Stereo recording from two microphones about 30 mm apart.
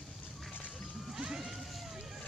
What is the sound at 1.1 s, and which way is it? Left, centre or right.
Vehicle, right.